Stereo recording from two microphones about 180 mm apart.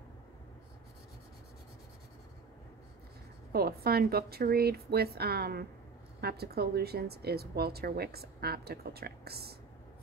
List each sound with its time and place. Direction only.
3.5 s a woman's voice: 60° right (ahead or behind)